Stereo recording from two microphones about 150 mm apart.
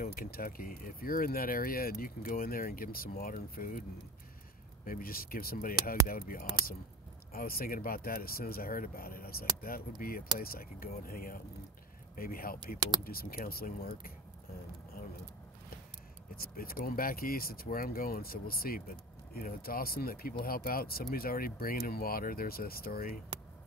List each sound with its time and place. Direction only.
0.0 s speech: 80° left
4.8 s speech: 75° left (ahead or behind)
12.7 s speech: 30° right (ahead or behind)
13.0 s speech: 80° left
16.3 s speech: 75° left (ahead or behind)